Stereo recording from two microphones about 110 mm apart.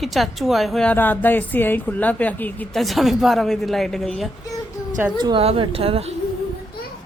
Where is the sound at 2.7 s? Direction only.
Centre (ahead or behind).